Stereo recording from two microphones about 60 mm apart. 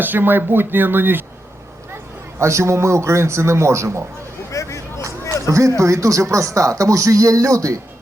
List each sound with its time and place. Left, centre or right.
0.0 s speech: right
2.4 s a man's voice: right
4.5 s vehicle: left
5.5 s speech: right